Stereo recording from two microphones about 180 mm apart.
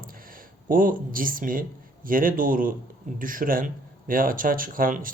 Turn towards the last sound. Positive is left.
turn(degrees=-50)  # may be behind; listen again after turning